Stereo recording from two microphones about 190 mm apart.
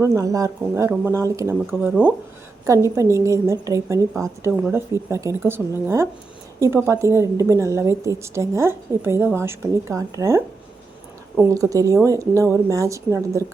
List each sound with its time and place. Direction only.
0.0 s a woman's voice: 15° right (ahead or behind)